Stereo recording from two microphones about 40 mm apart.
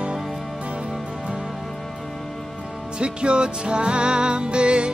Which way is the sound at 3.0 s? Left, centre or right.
Right.